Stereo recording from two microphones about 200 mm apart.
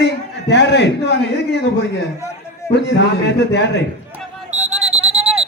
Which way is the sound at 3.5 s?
60° left (ahead or behind).